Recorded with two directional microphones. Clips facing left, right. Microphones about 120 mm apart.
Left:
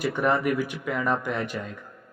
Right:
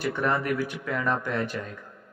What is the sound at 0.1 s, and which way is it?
Speech, 15° left (ahead or behind).